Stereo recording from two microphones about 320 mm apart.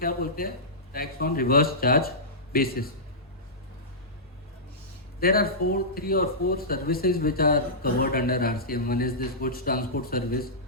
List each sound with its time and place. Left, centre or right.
0.0 s speech: left
5.2 s speech: left